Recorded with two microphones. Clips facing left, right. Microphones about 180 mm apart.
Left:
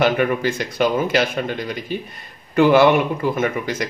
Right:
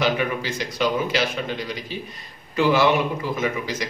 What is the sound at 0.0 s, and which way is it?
A man's voice, 50° left (ahead or behind).